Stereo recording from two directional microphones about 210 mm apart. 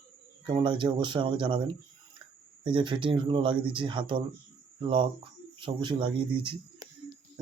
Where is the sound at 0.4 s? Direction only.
25° right (ahead or behind).